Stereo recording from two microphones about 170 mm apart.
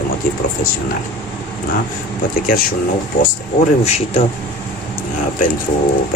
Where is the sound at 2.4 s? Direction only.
60° left (ahead or behind).